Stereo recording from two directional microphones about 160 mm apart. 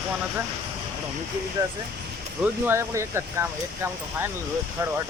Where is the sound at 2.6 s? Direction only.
15° right (ahead or behind).